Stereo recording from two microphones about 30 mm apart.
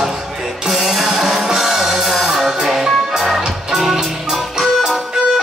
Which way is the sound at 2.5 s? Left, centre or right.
Centre.